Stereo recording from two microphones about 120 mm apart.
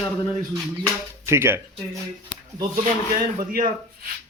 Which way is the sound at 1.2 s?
20° right (ahead or behind).